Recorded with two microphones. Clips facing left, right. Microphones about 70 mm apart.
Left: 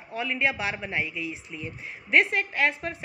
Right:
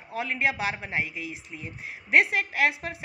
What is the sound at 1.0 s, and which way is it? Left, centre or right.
A woman's voice, right.